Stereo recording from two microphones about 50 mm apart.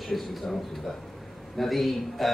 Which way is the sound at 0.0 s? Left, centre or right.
Centre.